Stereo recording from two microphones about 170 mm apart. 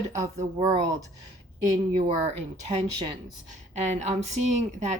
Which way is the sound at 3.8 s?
45° right (ahead or behind).